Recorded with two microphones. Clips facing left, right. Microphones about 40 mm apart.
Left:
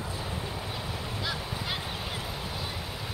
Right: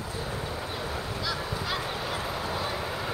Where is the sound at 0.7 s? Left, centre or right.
Right.